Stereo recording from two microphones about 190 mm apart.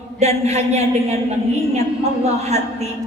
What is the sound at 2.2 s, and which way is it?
Speech, 35° right (ahead or behind).